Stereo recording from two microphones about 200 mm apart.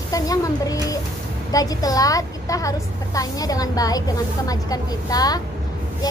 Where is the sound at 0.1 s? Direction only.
15° left (ahead or behind).